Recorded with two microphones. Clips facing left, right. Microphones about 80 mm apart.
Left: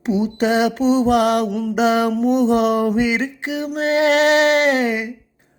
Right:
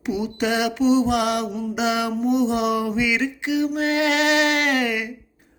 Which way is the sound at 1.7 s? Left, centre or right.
Left.